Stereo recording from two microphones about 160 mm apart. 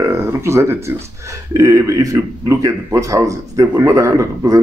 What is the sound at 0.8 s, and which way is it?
A man's voice, 15° right (ahead or behind).